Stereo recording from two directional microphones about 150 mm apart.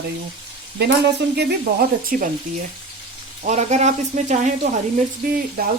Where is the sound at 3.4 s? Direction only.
50° right (ahead or behind).